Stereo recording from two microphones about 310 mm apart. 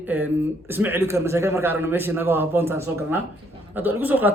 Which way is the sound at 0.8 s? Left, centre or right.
Centre.